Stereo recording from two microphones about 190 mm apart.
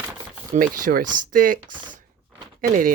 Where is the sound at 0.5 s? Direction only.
50° right (ahead or behind).